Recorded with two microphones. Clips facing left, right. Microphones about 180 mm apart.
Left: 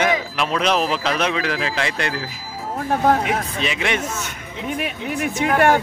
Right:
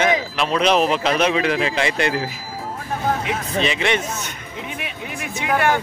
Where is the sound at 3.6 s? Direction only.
5° left (ahead or behind).